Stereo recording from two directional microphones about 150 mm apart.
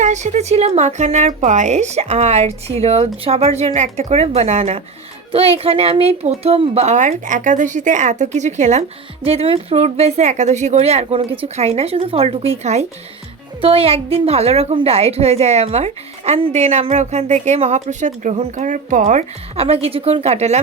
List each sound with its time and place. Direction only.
0.0 s a woman's voice: 50° right (ahead or behind)
9.2 s a woman's voice: 40° right (ahead or behind)